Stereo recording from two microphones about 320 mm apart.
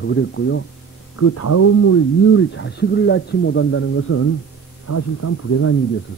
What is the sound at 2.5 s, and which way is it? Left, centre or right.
Speech, left.